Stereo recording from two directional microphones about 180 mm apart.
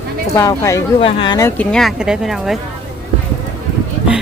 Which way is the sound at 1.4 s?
10° left (ahead or behind).